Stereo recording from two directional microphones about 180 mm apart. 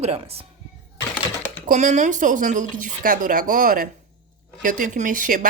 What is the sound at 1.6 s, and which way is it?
Speech, 40° right (ahead or behind).